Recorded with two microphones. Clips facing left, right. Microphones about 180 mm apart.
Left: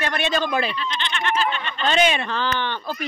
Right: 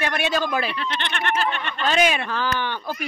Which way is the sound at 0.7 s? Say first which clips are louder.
Even; 60° right (ahead or behind).